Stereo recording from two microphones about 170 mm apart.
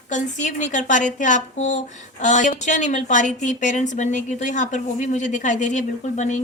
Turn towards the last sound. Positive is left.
turn(degrees=45)  # may be behind; listen again after turning